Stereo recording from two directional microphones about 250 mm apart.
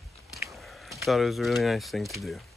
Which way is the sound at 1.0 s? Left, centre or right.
Centre.